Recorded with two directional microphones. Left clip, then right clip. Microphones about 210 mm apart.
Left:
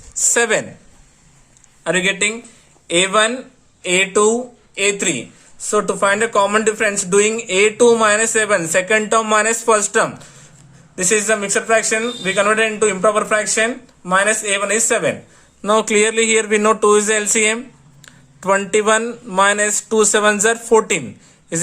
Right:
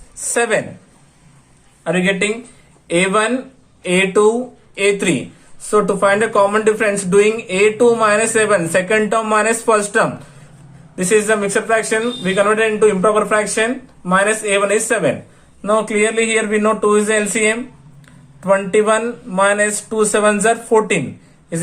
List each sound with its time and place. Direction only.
0.2 s a sound: 35° left (ahead or behind)
1.8 s a man's voice: 30° left (ahead or behind)
15.6 s speech: 35° left (ahead or behind)